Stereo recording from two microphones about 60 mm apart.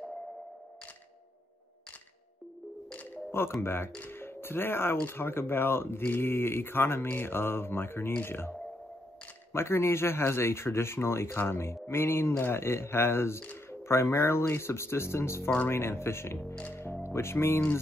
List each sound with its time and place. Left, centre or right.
3.3 s music: left
3.6 s speech: left